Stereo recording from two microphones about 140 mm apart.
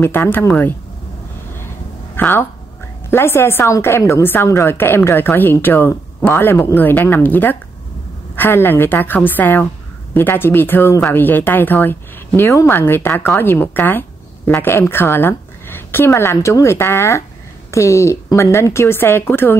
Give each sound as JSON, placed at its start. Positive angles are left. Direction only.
{"t": 0.0, "sound": "speech", "side_deg": 15}
{"t": 2.1, "sound": "a woman's voice", "side_deg": 15}